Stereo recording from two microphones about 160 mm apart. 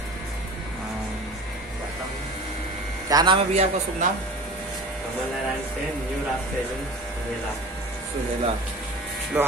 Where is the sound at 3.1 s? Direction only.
25° right (ahead or behind).